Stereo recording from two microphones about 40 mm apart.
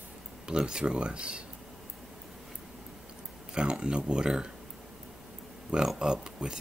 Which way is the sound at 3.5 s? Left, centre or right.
Right.